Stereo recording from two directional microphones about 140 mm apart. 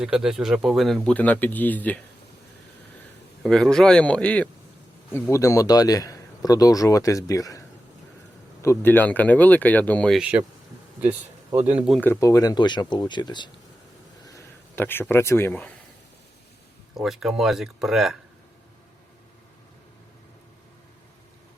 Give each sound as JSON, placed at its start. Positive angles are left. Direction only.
{"t": 0.0, "sound": "speech", "side_deg": -5}
{"t": 3.4, "sound": "speech", "side_deg": 5}
{"t": 8.6, "sound": "speech", "side_deg": 15}
{"t": 10.2, "sound": "speech", "side_deg": -10}
{"t": 11.6, "sound": "speech", "side_deg": -10}
{"t": 12.2, "sound": "speech", "side_deg": 25}
{"t": 14.3, "sound": "speech", "side_deg": 20}
{"t": 16.9, "sound": "speech", "side_deg": 0}